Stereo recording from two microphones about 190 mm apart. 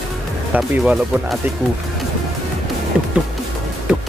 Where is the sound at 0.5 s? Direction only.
5° right (ahead or behind).